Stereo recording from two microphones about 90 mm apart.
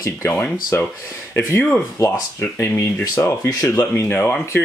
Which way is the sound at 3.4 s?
40° left (ahead or behind).